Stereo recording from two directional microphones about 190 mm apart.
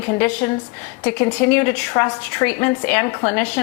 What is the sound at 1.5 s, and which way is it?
A woman's voice, 15° left (ahead or behind).